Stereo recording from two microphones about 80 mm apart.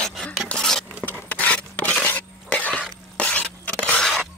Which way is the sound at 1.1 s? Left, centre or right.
Left.